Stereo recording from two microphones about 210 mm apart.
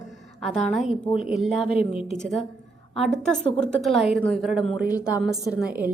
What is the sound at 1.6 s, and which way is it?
Speech, 30° left (ahead or behind).